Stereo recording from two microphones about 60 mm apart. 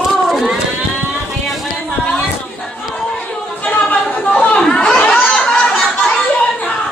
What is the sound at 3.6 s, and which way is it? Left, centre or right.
Chatter, left.